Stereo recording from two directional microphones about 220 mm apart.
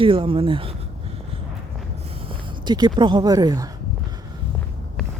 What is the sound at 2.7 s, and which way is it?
Speech, 20° right (ahead or behind).